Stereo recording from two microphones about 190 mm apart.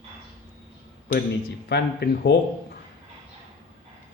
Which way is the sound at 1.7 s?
60° left (ahead or behind).